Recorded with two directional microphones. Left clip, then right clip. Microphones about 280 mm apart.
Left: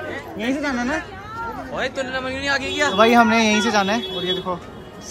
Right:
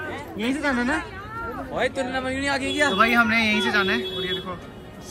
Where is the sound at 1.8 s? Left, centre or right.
Right.